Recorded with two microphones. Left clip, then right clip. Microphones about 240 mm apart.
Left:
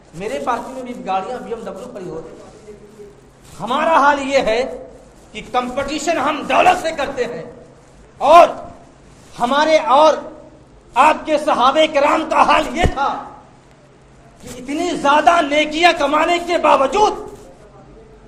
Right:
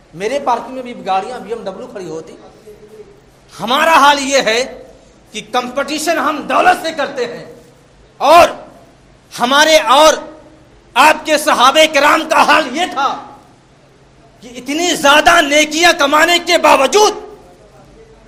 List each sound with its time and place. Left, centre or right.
0.2 s a man's voice: right
3.6 s a man's voice: right
14.7 s speech: right